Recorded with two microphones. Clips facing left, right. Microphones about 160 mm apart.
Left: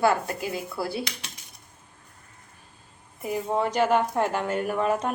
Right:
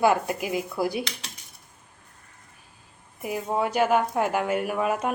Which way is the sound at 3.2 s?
5° right (ahead or behind).